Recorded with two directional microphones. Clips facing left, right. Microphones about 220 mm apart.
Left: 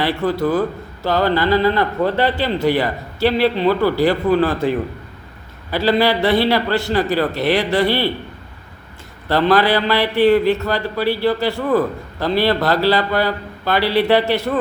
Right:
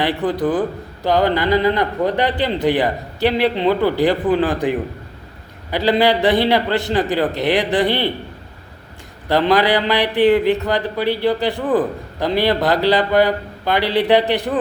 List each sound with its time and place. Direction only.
0.0 s a man's voice: 20° right (ahead or behind)
9.3 s speech: 15° right (ahead or behind)